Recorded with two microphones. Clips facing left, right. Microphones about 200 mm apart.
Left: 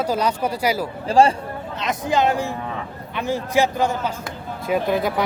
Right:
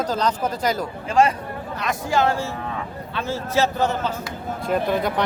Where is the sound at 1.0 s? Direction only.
30° left (ahead or behind).